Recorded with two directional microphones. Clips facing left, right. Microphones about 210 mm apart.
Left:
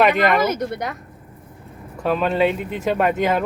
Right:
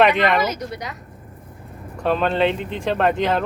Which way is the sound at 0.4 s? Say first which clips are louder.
Left 4 dB; 55° left (ahead or behind).